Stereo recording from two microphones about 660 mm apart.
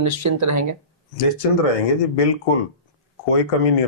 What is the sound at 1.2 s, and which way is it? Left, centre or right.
Speech, left.